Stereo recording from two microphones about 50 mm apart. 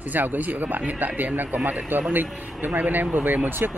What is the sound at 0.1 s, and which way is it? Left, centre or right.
Speech, right.